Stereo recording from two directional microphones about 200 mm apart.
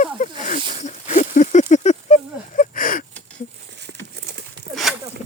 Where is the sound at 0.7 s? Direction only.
35° left (ahead or behind).